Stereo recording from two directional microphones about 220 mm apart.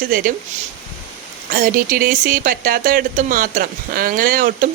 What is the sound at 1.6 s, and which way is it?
Speech, 40° right (ahead or behind).